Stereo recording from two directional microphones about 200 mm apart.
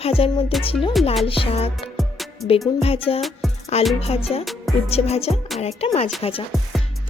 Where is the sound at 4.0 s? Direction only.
30° left (ahead or behind).